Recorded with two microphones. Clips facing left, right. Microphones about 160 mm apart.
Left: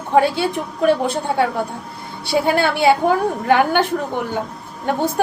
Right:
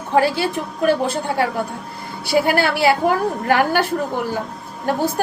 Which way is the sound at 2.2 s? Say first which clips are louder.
Even; 25° left (ahead or behind).